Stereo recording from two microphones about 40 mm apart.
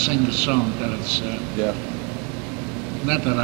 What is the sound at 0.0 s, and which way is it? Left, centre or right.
A man's voice, centre.